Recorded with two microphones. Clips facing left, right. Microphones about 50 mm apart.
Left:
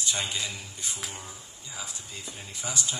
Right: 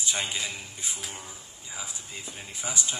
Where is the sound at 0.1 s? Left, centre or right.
Right.